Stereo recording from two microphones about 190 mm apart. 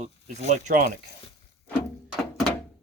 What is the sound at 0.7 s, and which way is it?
Speech, 45° right (ahead or behind).